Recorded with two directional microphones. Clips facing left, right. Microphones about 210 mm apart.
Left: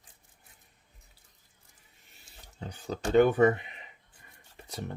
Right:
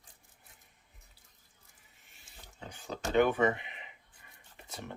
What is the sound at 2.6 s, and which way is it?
Speech, 40° left (ahead or behind).